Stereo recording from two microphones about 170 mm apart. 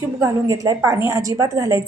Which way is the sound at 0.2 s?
20° right (ahead or behind).